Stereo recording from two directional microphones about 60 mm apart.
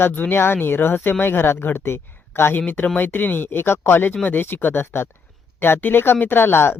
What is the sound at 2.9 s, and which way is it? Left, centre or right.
Speech, left.